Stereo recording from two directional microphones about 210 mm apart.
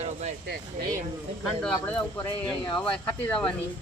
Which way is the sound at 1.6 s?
5° left (ahead or behind).